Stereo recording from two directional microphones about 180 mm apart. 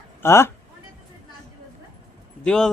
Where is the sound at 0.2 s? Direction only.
15° left (ahead or behind).